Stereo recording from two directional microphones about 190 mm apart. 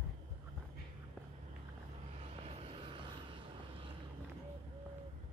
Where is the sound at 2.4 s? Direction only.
30° right (ahead or behind).